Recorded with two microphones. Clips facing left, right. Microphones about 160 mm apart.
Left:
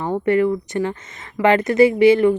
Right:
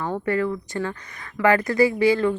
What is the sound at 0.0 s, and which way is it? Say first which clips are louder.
Speech: left 6 dB; 20° left (ahead or behind).